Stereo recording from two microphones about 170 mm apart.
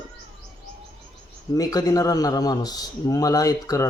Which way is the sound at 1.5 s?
20° left (ahead or behind).